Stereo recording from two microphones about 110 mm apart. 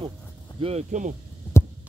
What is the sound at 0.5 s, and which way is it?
Speech, 70° right (ahead or behind).